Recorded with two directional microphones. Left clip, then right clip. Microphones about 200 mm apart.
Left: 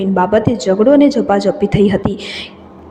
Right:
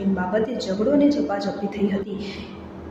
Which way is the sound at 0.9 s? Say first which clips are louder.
Left 9 dB; 45° left (ahead or behind).